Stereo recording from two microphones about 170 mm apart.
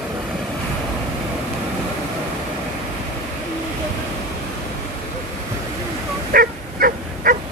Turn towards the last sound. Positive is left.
turn(degrees=-60)  # may be behind; listen again after turning